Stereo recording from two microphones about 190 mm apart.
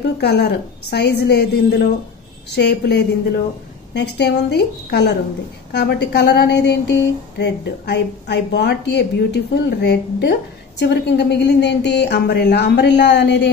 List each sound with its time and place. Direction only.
0.2 s a woman's voice: 60° left (ahead or behind)